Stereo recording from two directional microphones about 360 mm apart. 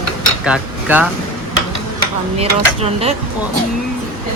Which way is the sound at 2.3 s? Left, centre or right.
Centre.